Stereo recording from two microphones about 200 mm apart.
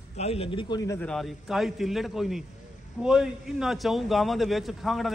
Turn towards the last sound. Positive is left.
turn(degrees=0)  # may be behind; listen again after turning